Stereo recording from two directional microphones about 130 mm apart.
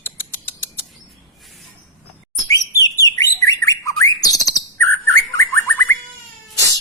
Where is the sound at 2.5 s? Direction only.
25° left (ahead or behind).